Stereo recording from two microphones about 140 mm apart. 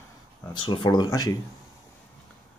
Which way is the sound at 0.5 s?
35° left (ahead or behind).